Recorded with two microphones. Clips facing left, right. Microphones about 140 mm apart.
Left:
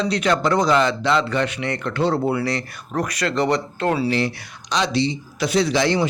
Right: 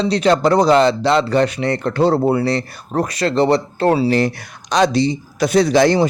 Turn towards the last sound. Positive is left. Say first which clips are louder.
# right 6 dB
turn(degrees=-45)  # may be behind; listen again after turning